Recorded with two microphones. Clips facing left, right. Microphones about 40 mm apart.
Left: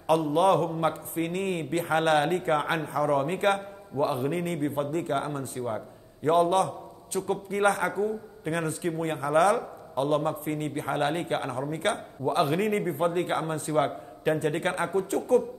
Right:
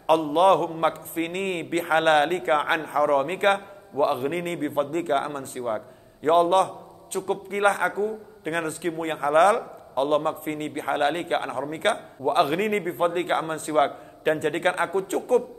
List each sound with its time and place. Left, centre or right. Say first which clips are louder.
0.0 s a man's voice: right 3 dB; right